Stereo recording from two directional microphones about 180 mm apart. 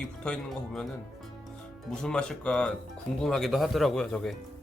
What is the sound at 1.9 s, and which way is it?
Speech, 5° left (ahead or behind).